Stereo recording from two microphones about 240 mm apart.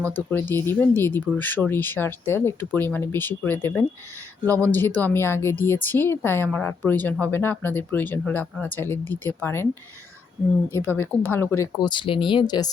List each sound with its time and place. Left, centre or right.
0.3 s speech: centre
10.7 s speech: centre